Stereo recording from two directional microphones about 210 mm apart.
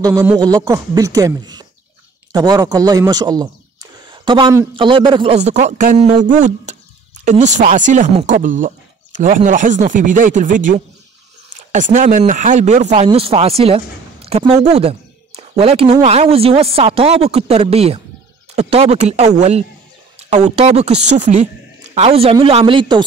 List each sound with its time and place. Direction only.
0.0 s speech: 15° right (ahead or behind)